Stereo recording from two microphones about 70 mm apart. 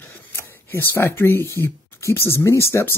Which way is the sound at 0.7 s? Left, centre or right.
Left.